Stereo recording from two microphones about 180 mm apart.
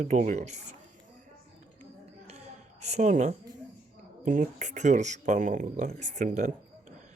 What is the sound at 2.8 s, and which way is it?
Speech, 40° right (ahead or behind).